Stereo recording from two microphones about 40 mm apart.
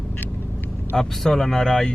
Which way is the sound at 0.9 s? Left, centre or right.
Centre.